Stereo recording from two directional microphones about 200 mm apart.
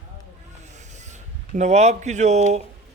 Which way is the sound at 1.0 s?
35° right (ahead or behind).